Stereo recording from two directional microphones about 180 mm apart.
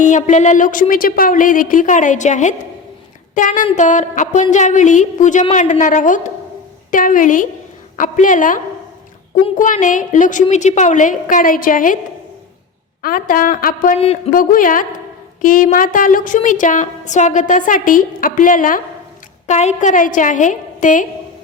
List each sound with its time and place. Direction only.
0.2 s a woman's voice: 40° left (ahead or behind)
13.0 s a woman's voice: 50° left (ahead or behind)